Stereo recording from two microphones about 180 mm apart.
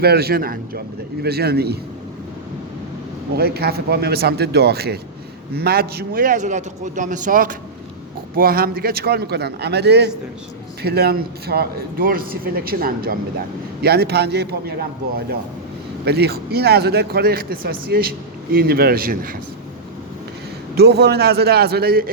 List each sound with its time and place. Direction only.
0.0 s a man's voice: 60° right (ahead or behind)
3.3 s a man's voice: 60° right (ahead or behind)
16.0 s a man's voice: 65° right (ahead or behind)
20.7 s a man's voice: 65° right (ahead or behind)